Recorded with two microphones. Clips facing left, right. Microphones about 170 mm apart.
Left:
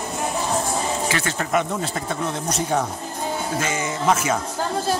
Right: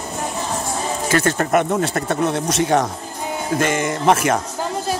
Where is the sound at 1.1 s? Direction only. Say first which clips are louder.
Right 10 dB; 45° right (ahead or behind); by 2.9 s 85° right.